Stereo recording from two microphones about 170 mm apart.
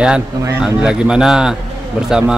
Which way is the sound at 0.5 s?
5° right (ahead or behind).